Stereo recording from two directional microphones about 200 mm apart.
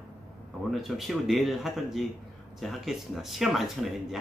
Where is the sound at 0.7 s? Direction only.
Centre (ahead or behind).